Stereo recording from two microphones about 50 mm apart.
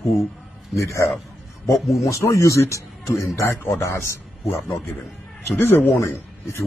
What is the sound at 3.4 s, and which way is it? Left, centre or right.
Speech, left.